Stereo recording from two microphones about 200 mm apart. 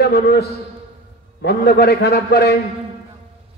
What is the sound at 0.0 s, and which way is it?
A man's voice, 55° left (ahead or behind).